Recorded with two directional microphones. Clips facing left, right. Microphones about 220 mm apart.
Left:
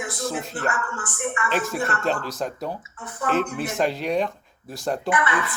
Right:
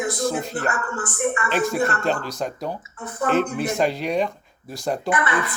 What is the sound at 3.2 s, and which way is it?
Speech, 35° right (ahead or behind).